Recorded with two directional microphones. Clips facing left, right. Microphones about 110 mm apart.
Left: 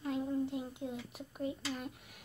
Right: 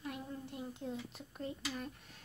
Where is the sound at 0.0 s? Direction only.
20° left (ahead or behind).